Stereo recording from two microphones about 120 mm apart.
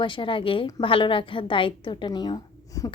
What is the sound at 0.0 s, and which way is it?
A woman's voice, 45° left (ahead or behind).